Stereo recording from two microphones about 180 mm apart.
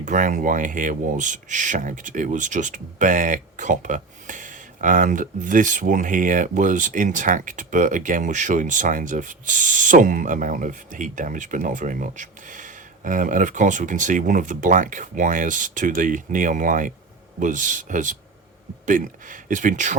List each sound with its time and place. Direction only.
0.0 s speech: 45° right (ahead or behind)